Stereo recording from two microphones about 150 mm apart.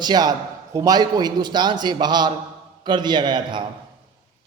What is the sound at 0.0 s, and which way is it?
A man's voice, 25° right (ahead or behind).